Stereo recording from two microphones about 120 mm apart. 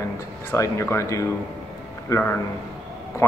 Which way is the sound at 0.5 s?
20° left (ahead or behind).